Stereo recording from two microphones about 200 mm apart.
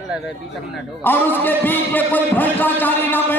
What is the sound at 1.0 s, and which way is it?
Speech, 10° left (ahead or behind).